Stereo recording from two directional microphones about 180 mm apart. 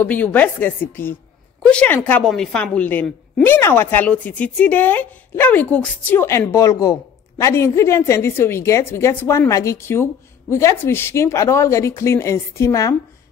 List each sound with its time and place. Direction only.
0.0 s speech: 10° left (ahead or behind)